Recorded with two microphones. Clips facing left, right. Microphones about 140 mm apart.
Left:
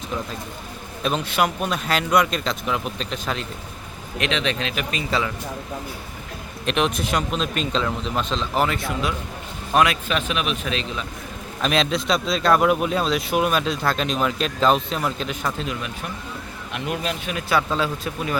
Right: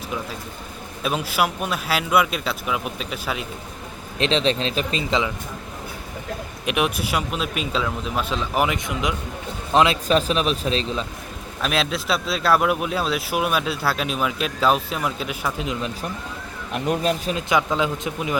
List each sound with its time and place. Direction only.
1.0 s speech: 5° right (ahead or behind)
4.2 s speech: 30° right (ahead or behind)
6.7 s speech: 10° right (ahead or behind)
9.7 s speech: 30° right (ahead or behind)
11.6 s speech: 5° right (ahead or behind)
15.6 s speech: 20° right (ahead or behind)
16.7 s speech: 40° right (ahead or behind)
17.6 s speech: 15° right (ahead or behind)